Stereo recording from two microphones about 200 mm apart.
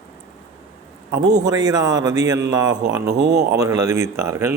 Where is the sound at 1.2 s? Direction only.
20° right (ahead or behind).